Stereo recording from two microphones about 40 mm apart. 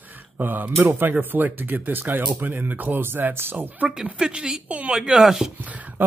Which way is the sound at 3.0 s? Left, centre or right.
Right.